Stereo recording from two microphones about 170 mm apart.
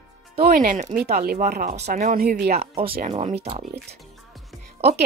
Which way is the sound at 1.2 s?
60° right (ahead or behind).